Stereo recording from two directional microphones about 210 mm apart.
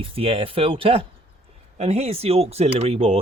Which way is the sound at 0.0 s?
25° right (ahead or behind).